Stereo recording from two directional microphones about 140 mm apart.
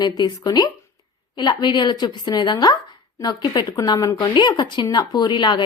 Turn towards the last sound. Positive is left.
turn(degrees=35)  # may be behind; listen again after turning